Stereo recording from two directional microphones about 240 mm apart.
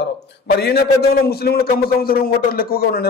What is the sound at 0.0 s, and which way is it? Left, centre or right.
A man's voice, left.